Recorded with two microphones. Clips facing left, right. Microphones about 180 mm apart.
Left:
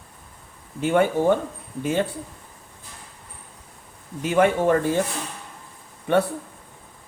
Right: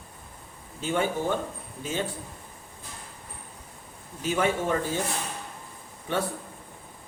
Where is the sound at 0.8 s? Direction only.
60° left (ahead or behind).